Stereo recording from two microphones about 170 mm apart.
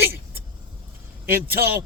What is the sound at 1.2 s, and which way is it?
Speech, 60° right (ahead or behind).